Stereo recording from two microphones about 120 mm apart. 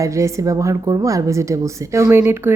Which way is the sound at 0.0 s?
25° right (ahead or behind).